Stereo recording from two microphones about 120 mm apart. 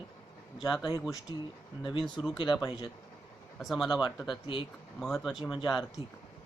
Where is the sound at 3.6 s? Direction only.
Centre (ahead or behind).